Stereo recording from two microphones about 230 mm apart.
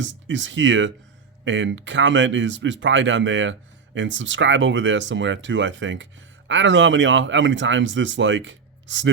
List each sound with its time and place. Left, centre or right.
0.0 s speech: right